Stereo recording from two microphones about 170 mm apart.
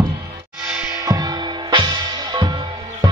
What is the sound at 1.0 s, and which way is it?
Music, 20° right (ahead or behind).